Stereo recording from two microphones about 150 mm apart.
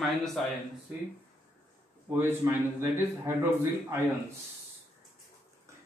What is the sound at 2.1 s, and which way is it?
A man's voice, 15° right (ahead or behind).